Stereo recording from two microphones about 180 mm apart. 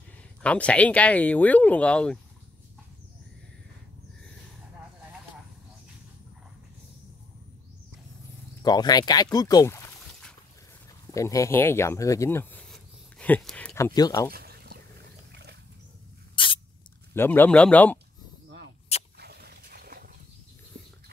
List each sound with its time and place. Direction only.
0.4 s speech: 5° left (ahead or behind)
8.6 s speech: 20° left (ahead or behind)
12.6 s a sound: 5° left (ahead or behind)
13.7 s speech: 20° left (ahead or behind)
14.3 s a sound: 60° right (ahead or behind)
16.4 s spray: 30° left (ahead or behind)
17.1 s speech: 10° left (ahead or behind)
19.1 s dog: 65° right (ahead or behind)